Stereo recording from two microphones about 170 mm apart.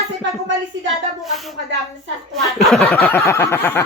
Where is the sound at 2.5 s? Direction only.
Centre (ahead or behind).